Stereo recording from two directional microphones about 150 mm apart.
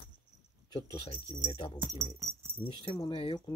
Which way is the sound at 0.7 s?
30° left (ahead or behind).